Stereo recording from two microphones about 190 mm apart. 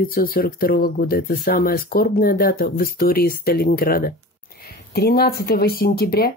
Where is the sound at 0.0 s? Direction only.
50° left (ahead or behind).